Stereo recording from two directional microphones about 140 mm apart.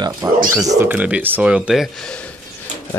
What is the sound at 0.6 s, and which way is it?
Speech, 20° right (ahead or behind).